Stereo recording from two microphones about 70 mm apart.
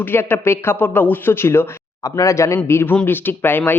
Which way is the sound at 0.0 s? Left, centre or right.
Left.